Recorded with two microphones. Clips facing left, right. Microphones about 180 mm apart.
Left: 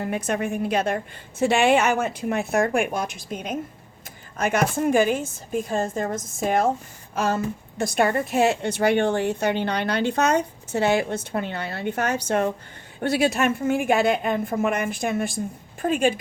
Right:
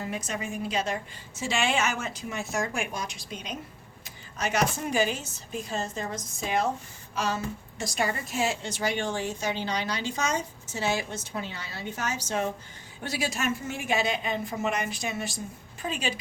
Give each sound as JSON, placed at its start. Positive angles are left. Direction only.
{"t": 0.0, "sound": "a woman's voice", "side_deg": 60}